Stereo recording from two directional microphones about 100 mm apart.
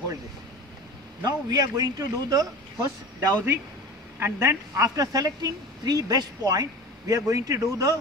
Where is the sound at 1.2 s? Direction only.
40° right (ahead or behind).